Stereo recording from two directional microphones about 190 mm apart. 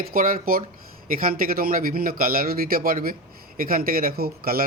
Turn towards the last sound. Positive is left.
turn(degrees=-50)  # may be behind; listen again after turning